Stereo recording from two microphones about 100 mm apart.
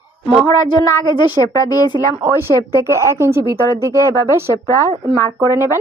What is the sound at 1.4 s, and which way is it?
Speech, 35° left (ahead or behind).